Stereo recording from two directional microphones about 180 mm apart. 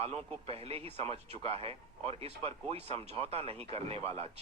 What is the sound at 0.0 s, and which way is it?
Speech, 35° right (ahead or behind).